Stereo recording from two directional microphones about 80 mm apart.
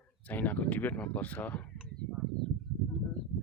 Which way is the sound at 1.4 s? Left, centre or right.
Centre.